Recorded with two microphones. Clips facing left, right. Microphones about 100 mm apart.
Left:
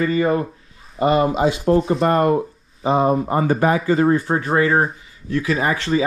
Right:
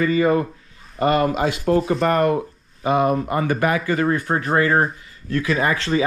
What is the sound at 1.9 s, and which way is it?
Speech, 30° left (ahead or behind).